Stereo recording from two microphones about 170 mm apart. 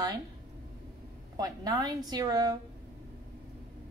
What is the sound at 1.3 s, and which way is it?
A woman's voice, 20° right (ahead or behind).